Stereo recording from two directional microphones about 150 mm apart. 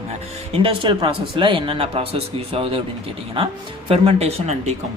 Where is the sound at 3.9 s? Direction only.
40° right (ahead or behind).